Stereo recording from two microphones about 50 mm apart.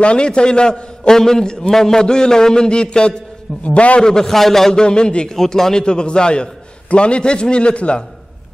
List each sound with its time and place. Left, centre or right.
0.0 s a man's voice: left
4.0 s a man's voice: centre
4.8 s a man's voice: centre